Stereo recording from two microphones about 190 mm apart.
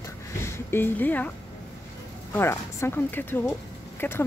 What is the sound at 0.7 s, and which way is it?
Speech, 10° left (ahead or behind).